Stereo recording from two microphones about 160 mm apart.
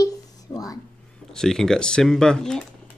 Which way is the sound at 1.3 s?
5° left (ahead or behind).